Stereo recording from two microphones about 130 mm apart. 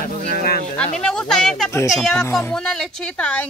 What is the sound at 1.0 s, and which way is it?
A woman's voice, 5° left (ahead or behind).